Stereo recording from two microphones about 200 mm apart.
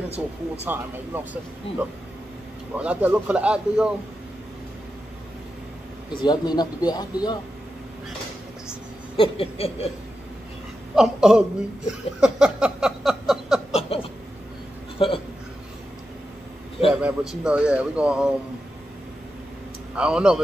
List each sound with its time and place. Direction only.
0.7 s speech: 10° right (ahead or behind)
6.2 s speech: 20° left (ahead or behind)
9.1 s speech: 25° left (ahead or behind)
11.0 s speech: 5° right (ahead or behind)
13.7 s a sound: 30° left (ahead or behind)
17.0 s speech: 5° right (ahead or behind)
20.0 s speech: 5° right (ahead or behind)